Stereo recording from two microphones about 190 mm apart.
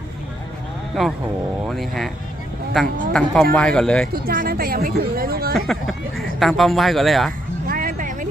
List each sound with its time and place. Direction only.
1.6 s speech: centre (ahead or behind)
4.1 s speech: 50° right (ahead or behind)
5.5 s speech: centre (ahead or behind)
7.7 s a sound: 45° right (ahead or behind)